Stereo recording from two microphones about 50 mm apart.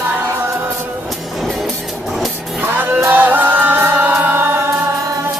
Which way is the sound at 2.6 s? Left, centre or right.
Right.